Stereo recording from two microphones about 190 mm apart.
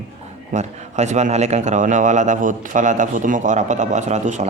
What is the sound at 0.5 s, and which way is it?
Speech, 35° right (ahead or behind).